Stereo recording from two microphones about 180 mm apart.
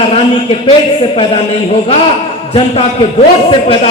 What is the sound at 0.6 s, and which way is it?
A man's voice, 30° left (ahead or behind).